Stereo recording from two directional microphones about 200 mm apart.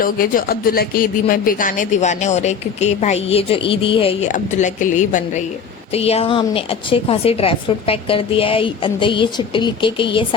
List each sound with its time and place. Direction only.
0.0 s speech: 45° left (ahead or behind); by 4.3 s 30° left (ahead or behind)
4.3 s a woman's voice: 40° left (ahead or behind)